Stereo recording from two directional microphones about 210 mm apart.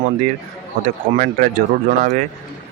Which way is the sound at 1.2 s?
40° right (ahead or behind).